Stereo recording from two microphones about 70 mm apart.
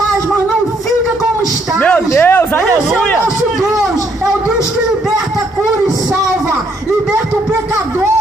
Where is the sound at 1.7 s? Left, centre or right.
Left.